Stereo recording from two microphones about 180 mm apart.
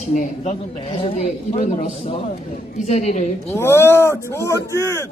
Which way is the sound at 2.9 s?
35° left (ahead or behind).